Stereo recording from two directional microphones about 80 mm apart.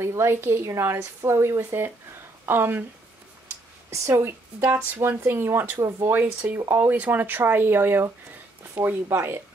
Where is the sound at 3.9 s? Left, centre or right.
Right; by 8.9 s centre.